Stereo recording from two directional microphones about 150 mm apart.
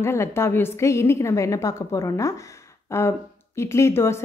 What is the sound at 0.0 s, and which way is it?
A woman's voice, 15° left (ahead or behind).